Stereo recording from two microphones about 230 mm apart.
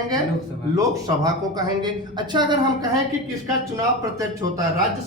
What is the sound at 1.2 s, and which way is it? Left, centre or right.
A man's voice, centre.